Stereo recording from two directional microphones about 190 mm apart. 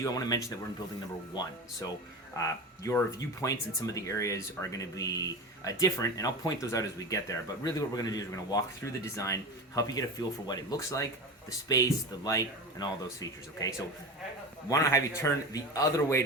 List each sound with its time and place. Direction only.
0.0 s speech: 20° left (ahead or behind)
2.4 s speech: 15° left (ahead or behind)